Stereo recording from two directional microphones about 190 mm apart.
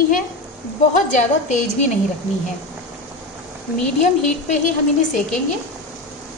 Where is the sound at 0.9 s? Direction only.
40° left (ahead or behind).